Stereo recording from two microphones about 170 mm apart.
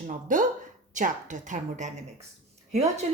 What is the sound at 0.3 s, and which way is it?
Speech, 50° right (ahead or behind).